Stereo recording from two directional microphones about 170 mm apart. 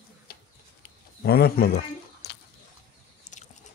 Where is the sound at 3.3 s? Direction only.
45° left (ahead or behind).